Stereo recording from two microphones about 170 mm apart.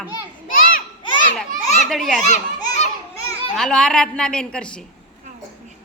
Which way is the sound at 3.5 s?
5° left (ahead or behind).